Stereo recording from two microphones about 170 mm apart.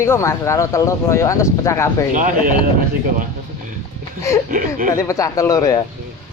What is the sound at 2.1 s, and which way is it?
Speech, 50° right (ahead or behind).